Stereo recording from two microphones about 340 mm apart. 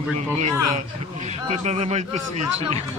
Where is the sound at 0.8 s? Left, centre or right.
Centre.